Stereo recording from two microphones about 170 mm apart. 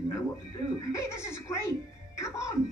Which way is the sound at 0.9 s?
15° left (ahead or behind).